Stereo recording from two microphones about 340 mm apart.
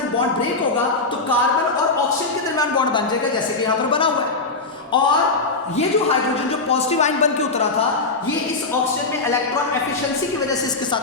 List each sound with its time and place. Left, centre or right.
2.6 s speech: centre
6.7 s speech: centre